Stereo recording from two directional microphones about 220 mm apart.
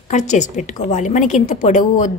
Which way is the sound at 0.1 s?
35° left (ahead or behind).